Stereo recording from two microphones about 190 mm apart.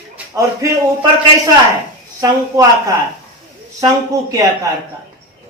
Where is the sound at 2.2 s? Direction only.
15° right (ahead or behind).